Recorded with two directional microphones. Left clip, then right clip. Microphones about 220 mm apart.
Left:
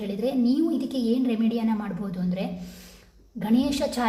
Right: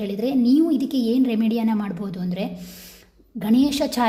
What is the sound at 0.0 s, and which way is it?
A woman's voice, 40° right (ahead or behind).